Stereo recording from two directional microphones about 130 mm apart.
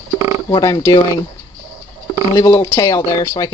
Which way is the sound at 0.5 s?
30° left (ahead or behind).